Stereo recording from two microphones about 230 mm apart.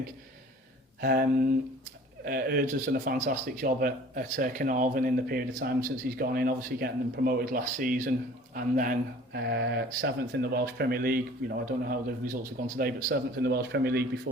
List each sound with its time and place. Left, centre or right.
1.0 s speech: right